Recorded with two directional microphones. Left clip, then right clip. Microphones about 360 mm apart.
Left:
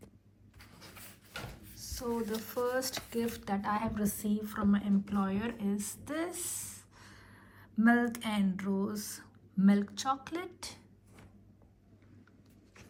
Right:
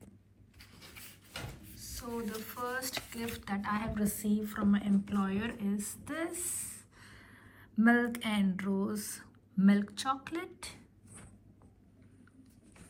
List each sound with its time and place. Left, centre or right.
2.4 s a woman's voice: centre